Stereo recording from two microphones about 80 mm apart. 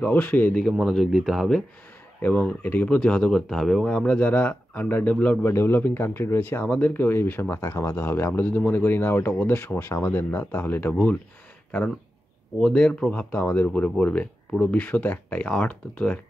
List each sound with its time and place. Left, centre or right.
0.0 s speech: left
0.7 s speech: centre
2.2 s speech: left
5.4 s speech: left
6.6 s speech: centre
12.5 s speech: centre